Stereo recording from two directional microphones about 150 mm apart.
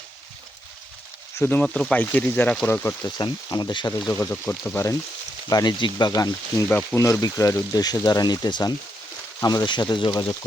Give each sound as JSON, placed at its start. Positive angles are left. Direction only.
{"t": 1.4, "sound": "speech", "side_deg": 10}
{"t": 3.2, "sound": "speech", "side_deg": 25}
{"t": 4.1, "sound": "speech", "side_deg": 15}
{"t": 5.5, "sound": "speech", "side_deg": 25}